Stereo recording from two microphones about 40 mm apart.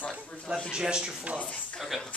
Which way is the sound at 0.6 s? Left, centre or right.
Centre.